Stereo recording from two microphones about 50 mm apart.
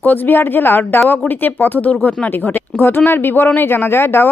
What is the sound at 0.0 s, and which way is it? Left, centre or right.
Speech, left.